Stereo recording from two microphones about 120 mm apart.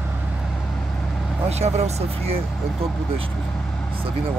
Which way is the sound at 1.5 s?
65° right (ahead or behind).